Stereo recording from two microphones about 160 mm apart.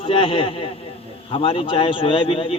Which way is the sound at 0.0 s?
35° left (ahead or behind).